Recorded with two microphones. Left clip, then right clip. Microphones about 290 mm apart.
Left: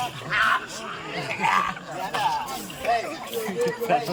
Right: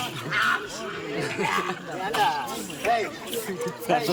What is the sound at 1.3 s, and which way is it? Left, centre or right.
Speech, centre.